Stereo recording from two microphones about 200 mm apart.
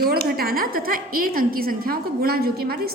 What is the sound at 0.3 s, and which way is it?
A woman's voice, 50° right (ahead or behind).